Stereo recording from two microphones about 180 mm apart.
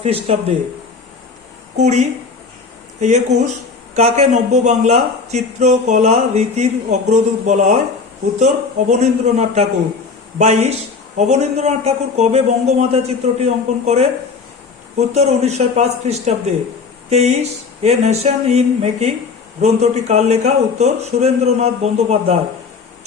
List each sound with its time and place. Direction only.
0.0 s a man's voice: 35° right (ahead or behind)
1.7 s a man's voice: 40° right (ahead or behind)
8.9 s a man's voice: 40° right (ahead or behind)